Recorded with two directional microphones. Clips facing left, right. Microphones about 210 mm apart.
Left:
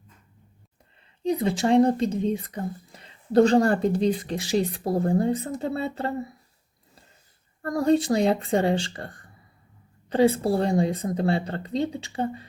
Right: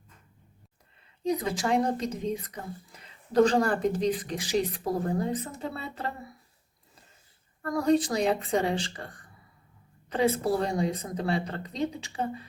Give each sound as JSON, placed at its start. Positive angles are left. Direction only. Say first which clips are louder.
{"t": 1.2, "sound": "speech", "louder": "left 5 dB", "side_deg": 30}
{"t": 7.6, "sound": "speech", "louder": "left 3 dB", "side_deg": 30}
{"t": 10.1, "sound": "speech", "louder": "left 5 dB", "side_deg": 30}